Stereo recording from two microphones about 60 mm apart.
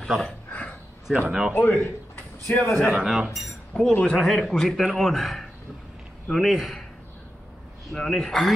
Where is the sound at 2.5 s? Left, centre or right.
Left.